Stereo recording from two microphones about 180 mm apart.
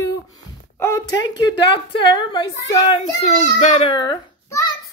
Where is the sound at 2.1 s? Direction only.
25° left (ahead or behind).